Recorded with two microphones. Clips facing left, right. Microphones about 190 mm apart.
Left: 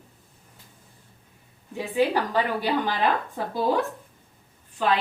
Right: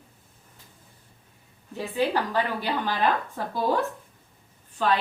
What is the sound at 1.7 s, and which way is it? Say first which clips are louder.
Speech: left 2 dB; 15° left (ahead or behind).